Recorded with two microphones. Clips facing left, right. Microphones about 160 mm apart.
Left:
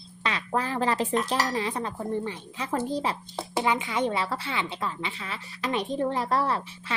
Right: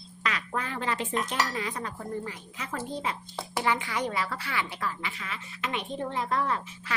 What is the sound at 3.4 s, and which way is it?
Speech, 20° left (ahead or behind).